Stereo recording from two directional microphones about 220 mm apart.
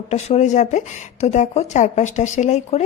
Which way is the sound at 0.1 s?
30° left (ahead or behind).